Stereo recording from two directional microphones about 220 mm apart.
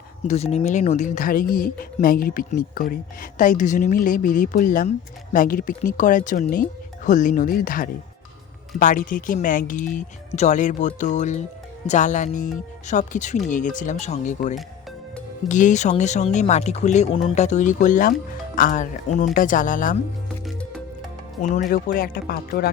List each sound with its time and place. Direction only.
0.3 s speech: 30° left (ahead or behind)
21.4 s speech: 35° left (ahead or behind)